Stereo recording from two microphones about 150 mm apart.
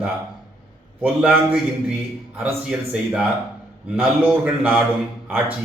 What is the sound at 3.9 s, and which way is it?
Speech, 10° right (ahead or behind).